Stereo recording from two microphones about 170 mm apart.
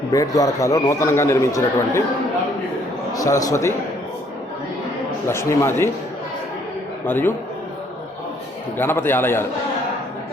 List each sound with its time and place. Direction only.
0.1 s a man's voice: 20° left (ahead or behind)
3.1 s a man's voice: 20° left (ahead or behind)
5.3 s a man's voice: 15° left (ahead or behind)
7.0 s a man's voice: 10° left (ahead or behind)
8.8 s a man's voice: 15° left (ahead or behind)